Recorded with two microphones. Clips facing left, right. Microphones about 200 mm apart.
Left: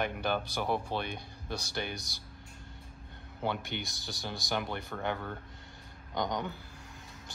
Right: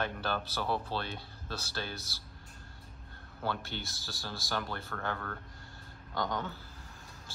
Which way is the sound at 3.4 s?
20° left (ahead or behind).